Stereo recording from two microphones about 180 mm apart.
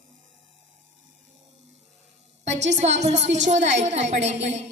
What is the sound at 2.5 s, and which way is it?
Speech, 75° right (ahead or behind).